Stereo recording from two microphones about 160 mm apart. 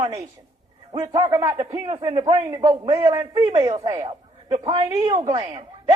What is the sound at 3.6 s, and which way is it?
Speech, 20° right (ahead or behind).